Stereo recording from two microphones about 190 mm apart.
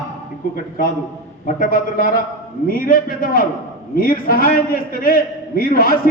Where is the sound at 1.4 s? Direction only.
45° left (ahead or behind).